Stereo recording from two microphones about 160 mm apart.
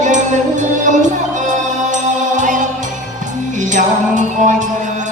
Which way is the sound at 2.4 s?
50° right (ahead or behind).